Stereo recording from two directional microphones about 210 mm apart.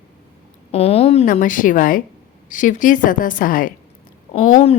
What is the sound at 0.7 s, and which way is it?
Speech, 30° left (ahead or behind).